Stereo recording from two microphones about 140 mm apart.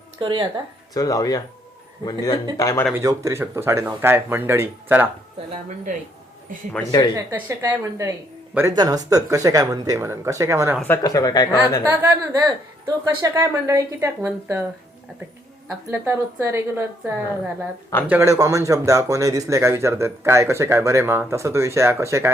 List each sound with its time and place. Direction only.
0.2 s speech: 35° right (ahead or behind)
0.9 s speech: 25° left (ahead or behind)
2.9 s speech: 20° right (ahead or behind)
5.6 s speech: 65° right (ahead or behind)
6.8 s speech: 10° left (ahead or behind)
7.2 s speech: 15° right (ahead or behind)
11.0 s speech: 25° left (ahead or behind)
11.9 s speech: 15° right (ahead or behind)
15.9 s speech: 15° right (ahead or behind)